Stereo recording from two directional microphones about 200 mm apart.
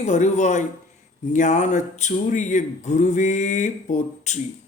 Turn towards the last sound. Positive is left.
turn(degrees=40)  # may be behind; listen again after turning